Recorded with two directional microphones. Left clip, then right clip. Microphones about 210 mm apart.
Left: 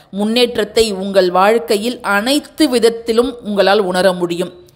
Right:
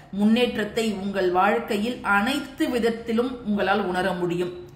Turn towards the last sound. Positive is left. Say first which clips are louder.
# left 11 dB
turn(degrees=45)  # may be behind; listen again after turning